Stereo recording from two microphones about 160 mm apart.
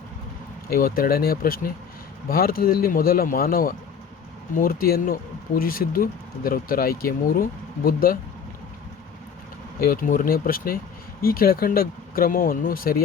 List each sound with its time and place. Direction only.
0.7 s speech: 65° left (ahead or behind)
9.8 s speech: 60° left (ahead or behind)